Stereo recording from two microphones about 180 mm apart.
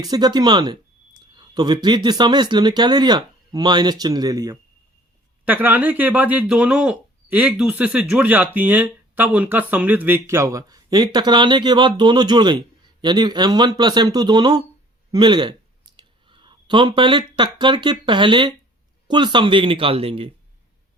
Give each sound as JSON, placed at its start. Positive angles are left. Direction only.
{"t": 0.0, "sound": "speech", "side_deg": -20}
{"t": 5.5, "sound": "speech", "side_deg": -10}